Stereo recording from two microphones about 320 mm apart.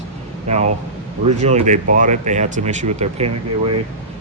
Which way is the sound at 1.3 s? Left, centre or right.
Right.